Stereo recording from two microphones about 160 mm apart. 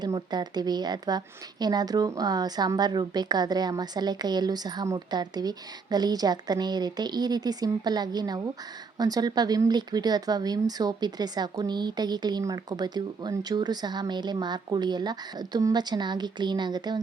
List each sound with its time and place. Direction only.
0.0 s a woman's voice: 25° right (ahead or behind)